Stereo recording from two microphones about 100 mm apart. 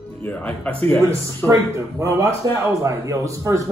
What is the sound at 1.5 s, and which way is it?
Speech, 35° right (ahead or behind).